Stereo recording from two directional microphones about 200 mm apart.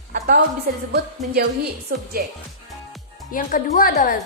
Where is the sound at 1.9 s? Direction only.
45° right (ahead or behind).